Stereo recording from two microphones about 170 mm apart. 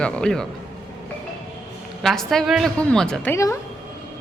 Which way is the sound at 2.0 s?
Centre (ahead or behind).